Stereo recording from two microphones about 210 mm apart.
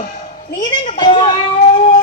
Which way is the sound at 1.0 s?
25° left (ahead or behind).